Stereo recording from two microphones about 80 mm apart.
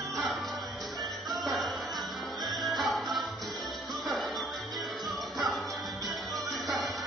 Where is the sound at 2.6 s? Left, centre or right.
Centre.